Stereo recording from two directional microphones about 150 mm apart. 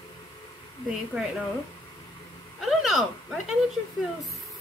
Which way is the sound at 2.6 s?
Centre (ahead or behind).